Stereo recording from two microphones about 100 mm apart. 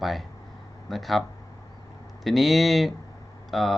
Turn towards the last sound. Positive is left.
turn(degrees=0)  # may be behind; listen again after turning